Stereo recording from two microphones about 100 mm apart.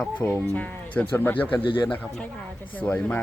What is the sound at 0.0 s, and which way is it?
Speech, 15° left (ahead or behind).